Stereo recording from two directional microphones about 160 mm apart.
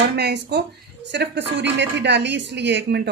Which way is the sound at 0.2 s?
90° right.